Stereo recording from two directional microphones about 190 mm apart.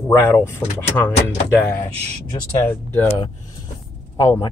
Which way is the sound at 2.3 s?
10° left (ahead or behind).